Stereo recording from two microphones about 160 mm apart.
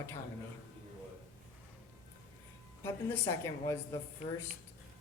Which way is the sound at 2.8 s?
15° left (ahead or behind).